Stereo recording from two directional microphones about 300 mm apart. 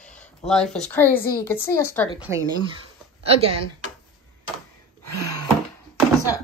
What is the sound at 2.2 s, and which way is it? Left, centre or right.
Speech, centre.